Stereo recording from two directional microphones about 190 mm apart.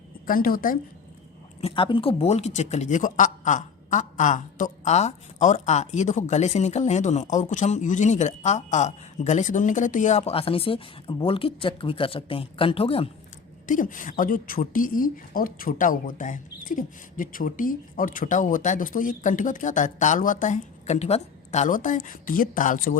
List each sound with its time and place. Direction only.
0.3 s a woman's voice: 50° left (ahead or behind)
1.6 s speech: 25° left (ahead or behind)
13.7 s a woman's voice: 45° left (ahead or behind)